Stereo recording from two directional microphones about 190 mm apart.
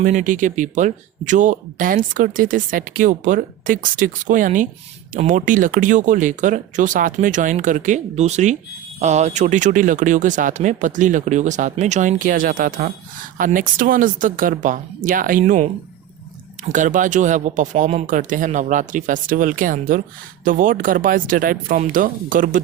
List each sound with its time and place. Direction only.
0.0 s speech: 40° right (ahead or behind)
16.7 s speech: 40° right (ahead or behind)